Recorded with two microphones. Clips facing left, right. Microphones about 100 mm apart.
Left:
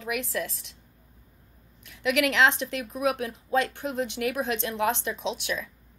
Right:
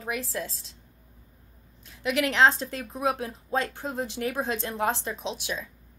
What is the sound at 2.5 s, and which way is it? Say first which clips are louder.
Speech: left 2 dB; 85° left.